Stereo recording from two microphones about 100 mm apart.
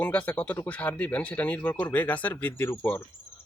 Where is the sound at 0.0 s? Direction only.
15° left (ahead or behind).